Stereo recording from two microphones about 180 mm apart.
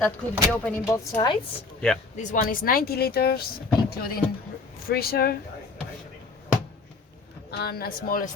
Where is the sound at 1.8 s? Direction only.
5° left (ahead or behind).